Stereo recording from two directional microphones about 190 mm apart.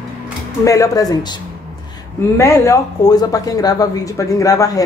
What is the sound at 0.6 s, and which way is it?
Speech, 15° left (ahead or behind).